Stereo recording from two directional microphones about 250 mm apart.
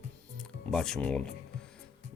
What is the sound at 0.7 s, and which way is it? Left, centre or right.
Speech, centre.